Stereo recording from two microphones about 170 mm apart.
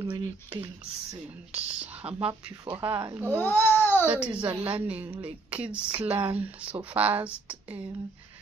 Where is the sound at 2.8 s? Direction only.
15° right (ahead or behind).